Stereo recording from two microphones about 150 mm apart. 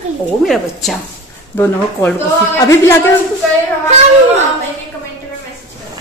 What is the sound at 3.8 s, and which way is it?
Speech, 50° right (ahead or behind).